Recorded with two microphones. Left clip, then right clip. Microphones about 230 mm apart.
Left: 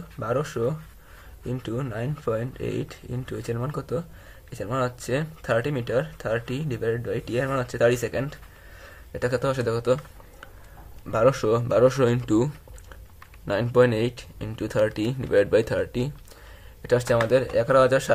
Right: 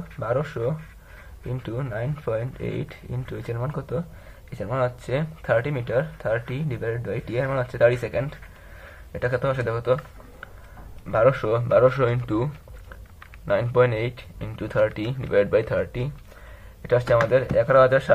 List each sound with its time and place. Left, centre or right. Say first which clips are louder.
0.2 s speech: even; left
11.1 s speech: right 1 dB; left
13.5 s speech: even; left